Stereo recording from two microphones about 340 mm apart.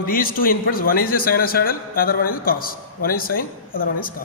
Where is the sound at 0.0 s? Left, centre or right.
Left.